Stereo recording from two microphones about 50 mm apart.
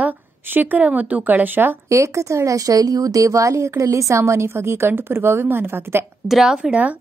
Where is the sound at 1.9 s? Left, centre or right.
Right.